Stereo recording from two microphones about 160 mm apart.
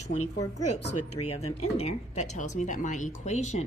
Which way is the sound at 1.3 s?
40° left (ahead or behind).